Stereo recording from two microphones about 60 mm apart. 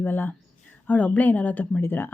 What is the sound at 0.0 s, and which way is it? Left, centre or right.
Speech, left.